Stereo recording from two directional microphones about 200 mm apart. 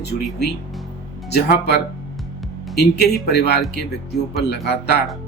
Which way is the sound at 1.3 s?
55° left (ahead or behind).